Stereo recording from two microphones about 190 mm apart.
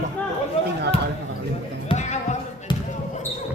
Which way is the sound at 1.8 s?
40° left (ahead or behind).